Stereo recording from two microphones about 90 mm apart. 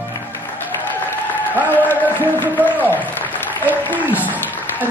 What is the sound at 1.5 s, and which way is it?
Music, 20° left (ahead or behind).